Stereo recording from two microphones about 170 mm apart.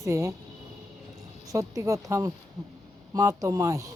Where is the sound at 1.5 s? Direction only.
20° right (ahead or behind).